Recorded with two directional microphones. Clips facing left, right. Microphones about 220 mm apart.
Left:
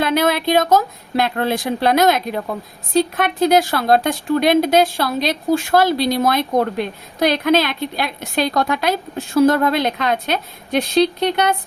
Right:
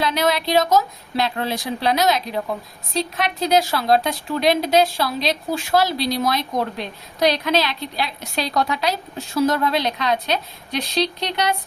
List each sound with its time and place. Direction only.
0.0 s speech: 55° left (ahead or behind)